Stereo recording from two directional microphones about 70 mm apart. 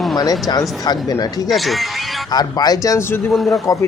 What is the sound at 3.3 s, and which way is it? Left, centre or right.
Speech, centre.